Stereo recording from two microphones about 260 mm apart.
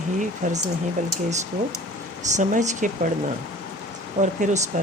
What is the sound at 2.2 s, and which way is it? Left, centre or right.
Speech, right.